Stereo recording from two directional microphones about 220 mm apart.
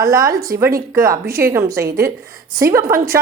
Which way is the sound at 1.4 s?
10° right (ahead or behind).